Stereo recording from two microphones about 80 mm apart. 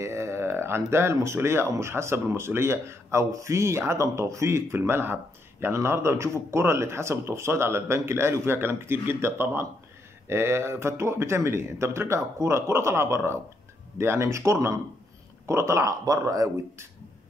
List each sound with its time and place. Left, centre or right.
0.0 s speech: right